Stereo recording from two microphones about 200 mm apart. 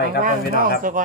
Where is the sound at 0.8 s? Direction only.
45° right (ahead or behind).